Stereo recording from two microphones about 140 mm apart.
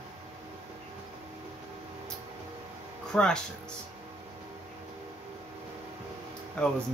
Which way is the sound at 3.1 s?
5° left (ahead or behind).